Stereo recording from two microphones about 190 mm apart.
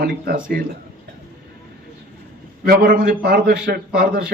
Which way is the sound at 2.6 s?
50° right (ahead or behind).